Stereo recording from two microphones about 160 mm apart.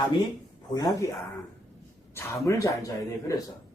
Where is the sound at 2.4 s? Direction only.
20° left (ahead or behind).